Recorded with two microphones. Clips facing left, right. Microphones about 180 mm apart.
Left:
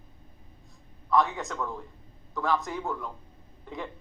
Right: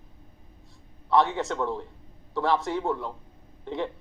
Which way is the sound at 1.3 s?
30° right (ahead or behind).